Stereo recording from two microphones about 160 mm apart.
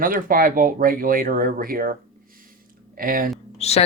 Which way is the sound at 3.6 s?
40° left (ahead or behind).